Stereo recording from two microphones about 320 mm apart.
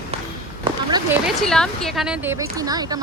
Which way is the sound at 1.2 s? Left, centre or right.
Centre.